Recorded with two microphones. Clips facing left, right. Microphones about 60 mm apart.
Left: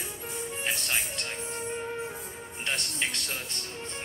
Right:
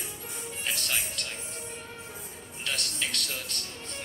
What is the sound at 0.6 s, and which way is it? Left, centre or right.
Speech, left.